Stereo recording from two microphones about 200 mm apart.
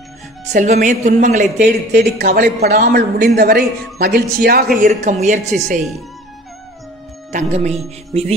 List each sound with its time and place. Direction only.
0.5 s speech: 35° right (ahead or behind)
1.6 s speech: 55° right (ahead or behind)
4.7 s speech: 40° right (ahead or behind)
7.3 s speech: 35° right (ahead or behind)